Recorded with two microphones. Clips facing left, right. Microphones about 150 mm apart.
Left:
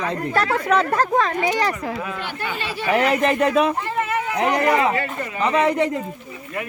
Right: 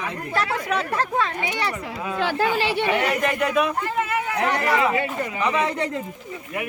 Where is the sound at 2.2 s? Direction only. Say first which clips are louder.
Right 7 dB; 90° right.